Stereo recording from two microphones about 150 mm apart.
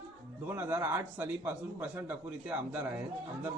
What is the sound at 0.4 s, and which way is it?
A man's voice, 15° right (ahead or behind).